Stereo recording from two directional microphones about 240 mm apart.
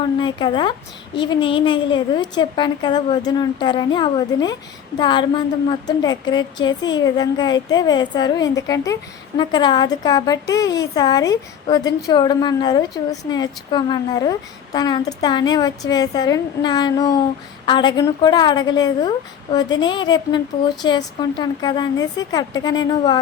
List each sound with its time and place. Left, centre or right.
0.2 s a woman's voice: centre